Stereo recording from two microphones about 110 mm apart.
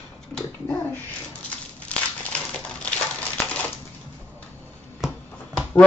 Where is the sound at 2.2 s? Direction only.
10° left (ahead or behind).